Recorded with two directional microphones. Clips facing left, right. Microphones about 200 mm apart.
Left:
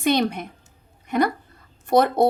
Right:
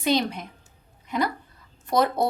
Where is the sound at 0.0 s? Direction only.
60° left (ahead or behind).